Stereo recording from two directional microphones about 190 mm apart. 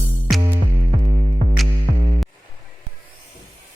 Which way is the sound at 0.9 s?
40° right (ahead or behind).